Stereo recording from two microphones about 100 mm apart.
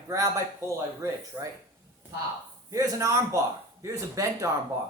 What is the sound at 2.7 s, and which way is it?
A man's voice, 35° right (ahead or behind).